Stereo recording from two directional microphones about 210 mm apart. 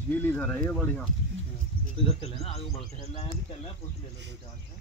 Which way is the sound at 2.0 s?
30° left (ahead or behind).